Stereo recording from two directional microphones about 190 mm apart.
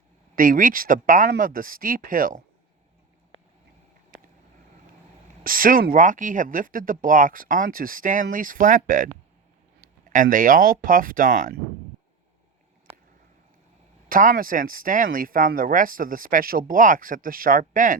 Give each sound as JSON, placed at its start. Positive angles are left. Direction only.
{"t": 0.3, "sound": "speech", "side_deg": -45}
{"t": 5.4, "sound": "speech", "side_deg": -50}
{"t": 14.1, "sound": "speech", "side_deg": -45}